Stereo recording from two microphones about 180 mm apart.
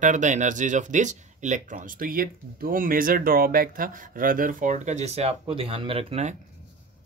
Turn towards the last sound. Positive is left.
turn(degrees=-35)  # may be behind; listen again after turning